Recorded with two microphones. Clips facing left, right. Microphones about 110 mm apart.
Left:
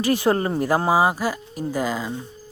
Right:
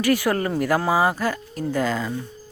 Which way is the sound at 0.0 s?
20° left (ahead or behind).